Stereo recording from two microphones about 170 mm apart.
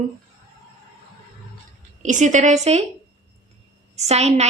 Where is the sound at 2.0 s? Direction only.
45° right (ahead or behind).